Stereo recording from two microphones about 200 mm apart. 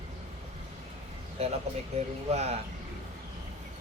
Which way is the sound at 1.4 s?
30° right (ahead or behind).